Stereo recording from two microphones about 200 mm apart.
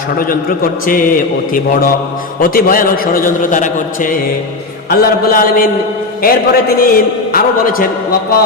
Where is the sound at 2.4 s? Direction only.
45° left (ahead or behind).